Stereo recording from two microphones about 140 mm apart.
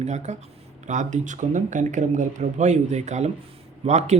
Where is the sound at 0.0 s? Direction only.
55° right (ahead or behind).